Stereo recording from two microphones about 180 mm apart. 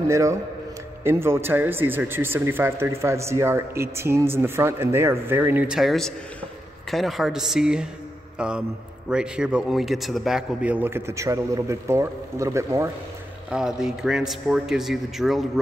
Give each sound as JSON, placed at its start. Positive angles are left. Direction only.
{"t": 0.1, "sound": "a man's voice", "side_deg": -15}
{"t": 13.5, "sound": "a man's voice", "side_deg": -5}